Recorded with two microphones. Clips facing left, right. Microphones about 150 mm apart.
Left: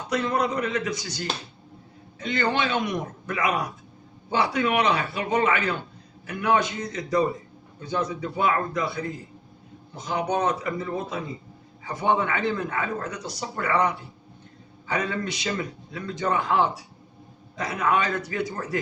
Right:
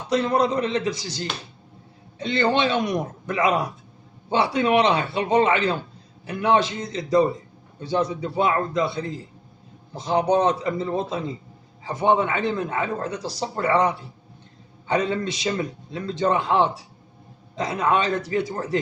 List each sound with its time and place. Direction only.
0.1 s a man's voice: 30° right (ahead or behind)